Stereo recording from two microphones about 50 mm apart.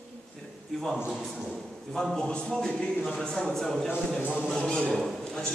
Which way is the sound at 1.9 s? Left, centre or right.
Centre.